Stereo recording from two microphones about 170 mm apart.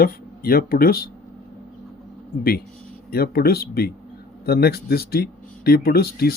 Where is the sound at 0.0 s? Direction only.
60° left (ahead or behind).